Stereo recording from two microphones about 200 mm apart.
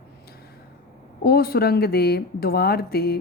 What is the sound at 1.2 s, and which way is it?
A woman's voice, 50° left (ahead or behind).